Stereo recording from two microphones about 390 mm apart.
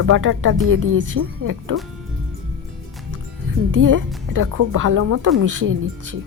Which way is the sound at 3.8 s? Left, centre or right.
Right.